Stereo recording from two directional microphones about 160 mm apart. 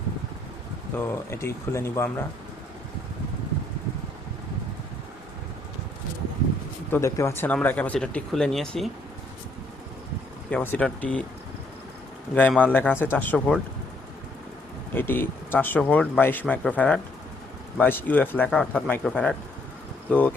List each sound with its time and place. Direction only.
0.9 s speech: 15° left (ahead or behind)
6.9 s speech: 20° left (ahead or behind); by 8.9 s centre (ahead or behind)
10.5 s speech: 10° left (ahead or behind)
12.3 s speech: 10° left (ahead or behind)
14.9 s speech: 15° left (ahead or behind)